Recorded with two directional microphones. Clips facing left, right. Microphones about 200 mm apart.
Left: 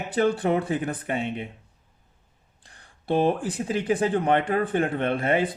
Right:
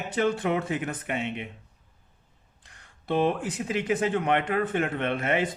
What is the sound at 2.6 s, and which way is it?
Speech, 35° left (ahead or behind).